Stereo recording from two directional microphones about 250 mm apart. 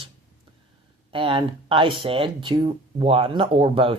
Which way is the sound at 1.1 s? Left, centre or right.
Right.